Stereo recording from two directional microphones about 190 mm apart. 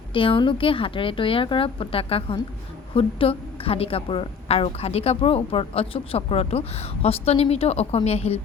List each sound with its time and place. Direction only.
0.1 s a woman's voice: 25° left (ahead or behind)